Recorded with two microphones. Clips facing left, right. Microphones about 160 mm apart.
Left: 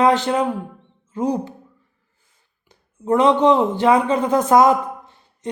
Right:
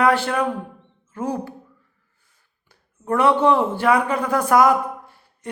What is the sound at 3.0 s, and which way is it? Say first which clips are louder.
A man's voice: left 3 dB; 20° left (ahead or behind).